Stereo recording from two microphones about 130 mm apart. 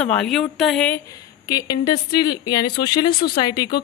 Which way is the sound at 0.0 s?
5° left (ahead or behind).